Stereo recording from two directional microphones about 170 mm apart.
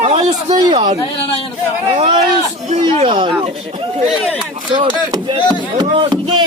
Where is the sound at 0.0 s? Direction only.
40° right (ahead or behind).